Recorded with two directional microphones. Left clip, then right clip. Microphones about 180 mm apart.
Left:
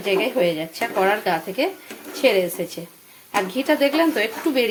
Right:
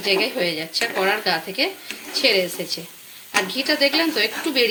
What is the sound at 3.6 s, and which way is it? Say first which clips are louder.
Speech: left 2 dB; 20° left (ahead or behind).